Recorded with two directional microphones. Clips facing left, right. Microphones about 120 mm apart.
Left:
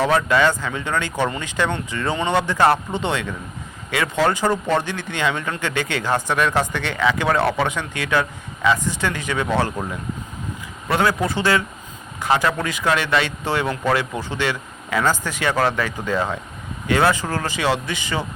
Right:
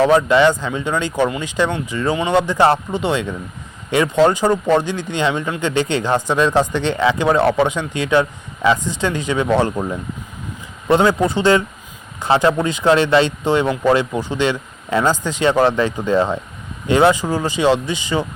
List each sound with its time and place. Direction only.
0.0 s speech: 20° right (ahead or behind)